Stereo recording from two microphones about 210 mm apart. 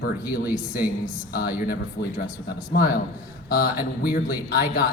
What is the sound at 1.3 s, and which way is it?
Speech, 45° left (ahead or behind).